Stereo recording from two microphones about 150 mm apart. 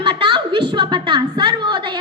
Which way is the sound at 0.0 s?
35° right (ahead or behind).